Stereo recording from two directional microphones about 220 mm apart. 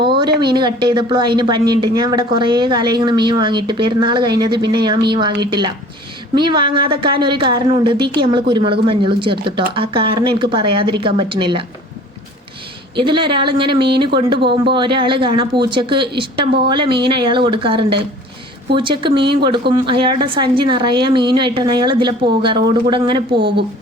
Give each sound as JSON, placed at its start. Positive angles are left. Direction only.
{"t": 0.0, "sound": "a sound", "side_deg": -20}
{"t": 0.3, "sound": "a woman's voice", "side_deg": -20}
{"t": 13.0, "sound": "a woman's voice", "side_deg": -20}
{"t": 19.1, "sound": "speech", "side_deg": -50}
{"t": 19.7, "sound": "a woman's voice", "side_deg": -20}